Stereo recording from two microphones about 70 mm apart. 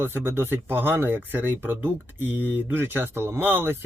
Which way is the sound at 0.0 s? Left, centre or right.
Right.